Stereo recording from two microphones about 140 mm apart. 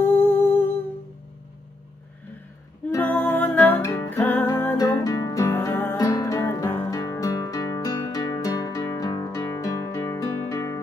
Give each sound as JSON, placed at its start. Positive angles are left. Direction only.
{"t": 0.0, "sound": "music", "side_deg": 15}
{"t": 3.0, "sound": "music", "side_deg": 15}
{"t": 4.7, "sound": "music", "side_deg": 25}
{"t": 5.5, "sound": "music", "side_deg": 15}